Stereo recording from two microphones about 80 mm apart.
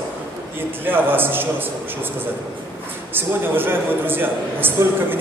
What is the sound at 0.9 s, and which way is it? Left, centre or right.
Speech, right.